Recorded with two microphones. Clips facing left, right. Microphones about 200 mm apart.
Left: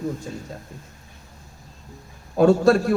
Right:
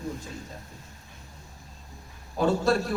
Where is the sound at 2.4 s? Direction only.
55° left (ahead or behind).